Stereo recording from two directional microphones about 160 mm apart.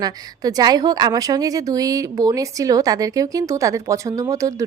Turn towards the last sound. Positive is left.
turn(degrees=-20)  # may be behind; listen again after turning